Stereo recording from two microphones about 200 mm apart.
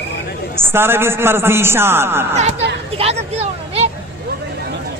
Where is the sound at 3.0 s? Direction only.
30° right (ahead or behind).